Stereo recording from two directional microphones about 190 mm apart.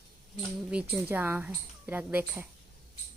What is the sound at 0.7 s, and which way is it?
Speech, 5° right (ahead or behind).